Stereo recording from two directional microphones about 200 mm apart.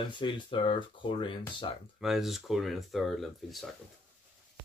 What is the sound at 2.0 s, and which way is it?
Speech, centre (ahead or behind).